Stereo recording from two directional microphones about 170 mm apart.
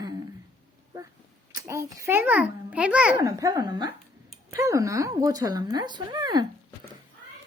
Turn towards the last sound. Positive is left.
turn(degrees=-25)  # may be behind; listen again after turning